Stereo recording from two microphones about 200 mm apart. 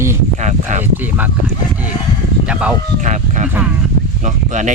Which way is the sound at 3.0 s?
35° right (ahead or behind).